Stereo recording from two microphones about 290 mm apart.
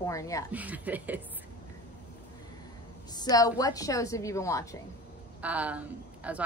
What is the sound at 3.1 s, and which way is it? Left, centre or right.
A woman's voice, centre.